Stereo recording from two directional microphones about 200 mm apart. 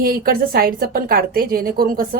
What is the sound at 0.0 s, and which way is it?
A woman's voice, 50° right (ahead or behind).